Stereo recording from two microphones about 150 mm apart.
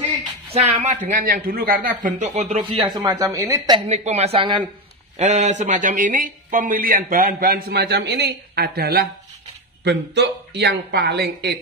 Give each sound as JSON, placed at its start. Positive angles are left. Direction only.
{"t": 0.5, "sound": "speech", "side_deg": -45}
{"t": 2.3, "sound": "a woman's voice", "side_deg": -45}
{"t": 3.7, "sound": "speech", "side_deg": -45}
{"t": 5.1, "sound": "speech", "side_deg": -50}
{"t": 10.6, "sound": "speech", "side_deg": -90}